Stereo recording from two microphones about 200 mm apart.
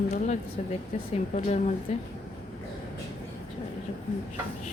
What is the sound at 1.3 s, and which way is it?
Speech, 35° left (ahead or behind).